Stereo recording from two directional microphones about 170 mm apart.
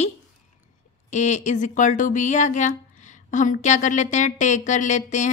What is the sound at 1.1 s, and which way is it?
Speech, 45° left (ahead or behind).